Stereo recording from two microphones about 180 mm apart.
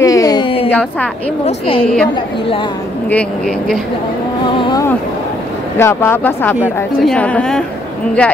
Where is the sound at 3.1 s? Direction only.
5° left (ahead or behind).